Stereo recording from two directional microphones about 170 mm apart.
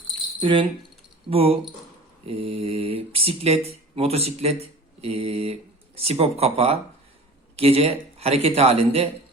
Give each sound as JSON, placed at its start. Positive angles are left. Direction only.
{"t": 0.4, "sound": "speech", "side_deg": -30}